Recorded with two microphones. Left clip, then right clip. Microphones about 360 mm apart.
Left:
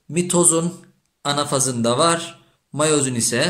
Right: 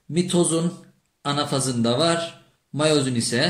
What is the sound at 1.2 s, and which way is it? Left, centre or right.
A man's voice, centre.